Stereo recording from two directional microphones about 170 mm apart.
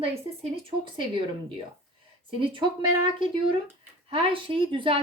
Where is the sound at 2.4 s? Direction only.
30° right (ahead or behind).